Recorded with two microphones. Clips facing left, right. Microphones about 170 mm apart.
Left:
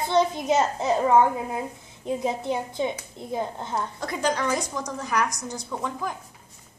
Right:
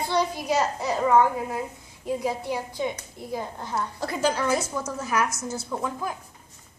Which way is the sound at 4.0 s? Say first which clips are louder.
Right 1 dB; 5° right (ahead or behind).